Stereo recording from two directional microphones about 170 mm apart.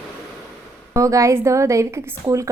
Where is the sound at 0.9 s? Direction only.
20° right (ahead or behind).